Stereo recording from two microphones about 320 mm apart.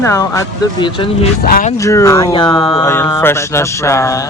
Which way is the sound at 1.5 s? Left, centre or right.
Left.